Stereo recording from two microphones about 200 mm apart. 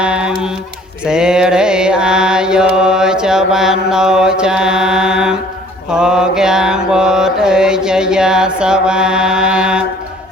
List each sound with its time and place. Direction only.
0.0 s music: 5° right (ahead or behind)
1.0 s mantra: 5° right (ahead or behind)